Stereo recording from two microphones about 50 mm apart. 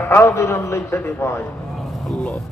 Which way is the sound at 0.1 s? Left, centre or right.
Left.